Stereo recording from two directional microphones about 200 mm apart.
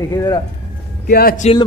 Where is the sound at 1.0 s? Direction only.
50° left (ahead or behind).